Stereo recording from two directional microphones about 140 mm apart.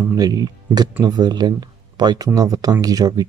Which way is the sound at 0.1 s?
25° right (ahead or behind).